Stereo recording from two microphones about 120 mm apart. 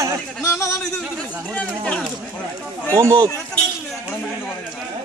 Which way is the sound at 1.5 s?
10° left (ahead or behind).